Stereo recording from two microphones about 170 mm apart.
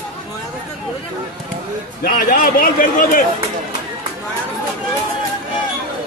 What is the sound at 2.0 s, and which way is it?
A man's voice, 55° left (ahead or behind).